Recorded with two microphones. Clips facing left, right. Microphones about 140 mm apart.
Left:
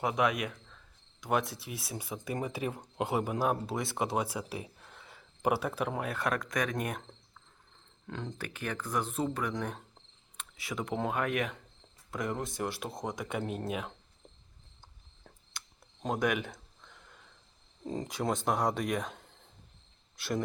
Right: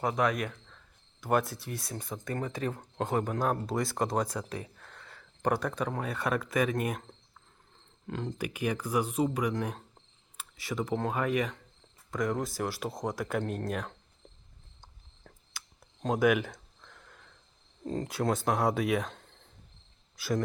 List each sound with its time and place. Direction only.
0.0 s a man's voice: 5° left (ahead or behind)
16.0 s a sound: 5° right (ahead or behind)
17.8 s speech: centre (ahead or behind)